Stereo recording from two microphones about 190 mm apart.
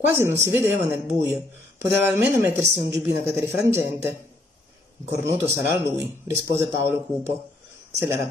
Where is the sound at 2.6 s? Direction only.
60° right (ahead or behind).